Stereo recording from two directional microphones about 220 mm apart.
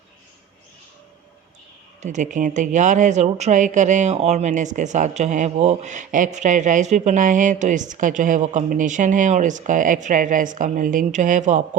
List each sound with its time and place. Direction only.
2.0 s speech: 35° right (ahead or behind)